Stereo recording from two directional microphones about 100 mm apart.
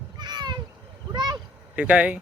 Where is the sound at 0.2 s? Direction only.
45° right (ahead or behind).